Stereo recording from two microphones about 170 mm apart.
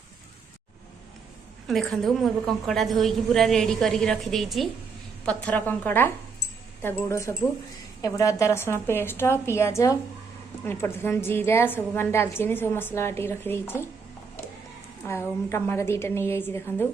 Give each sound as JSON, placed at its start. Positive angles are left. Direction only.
{"t": 1.6, "sound": "a woman's voice", "side_deg": 0}
{"t": 15.0, "sound": "a woman's voice", "side_deg": 15}